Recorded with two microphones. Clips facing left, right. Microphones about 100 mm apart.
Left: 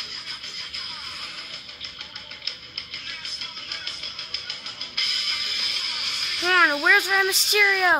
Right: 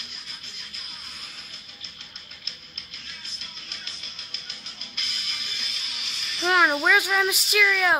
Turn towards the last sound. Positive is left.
turn(degrees=5)  # may be behind; listen again after turning